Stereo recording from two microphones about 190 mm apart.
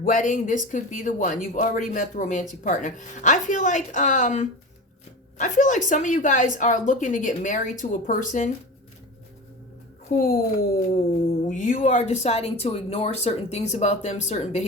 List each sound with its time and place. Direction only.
0.0 s speech: 45° left (ahead or behind)
10.1 s speech: 50° left (ahead or behind)